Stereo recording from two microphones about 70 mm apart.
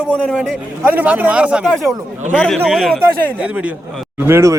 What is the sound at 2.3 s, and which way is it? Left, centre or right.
Speech, centre.